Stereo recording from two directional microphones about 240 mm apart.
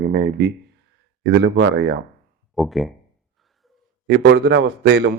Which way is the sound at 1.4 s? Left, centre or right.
Right.